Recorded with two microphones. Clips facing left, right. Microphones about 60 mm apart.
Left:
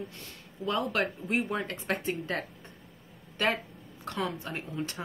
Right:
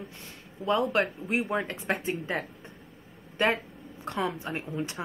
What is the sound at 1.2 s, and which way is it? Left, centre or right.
Speech, centre.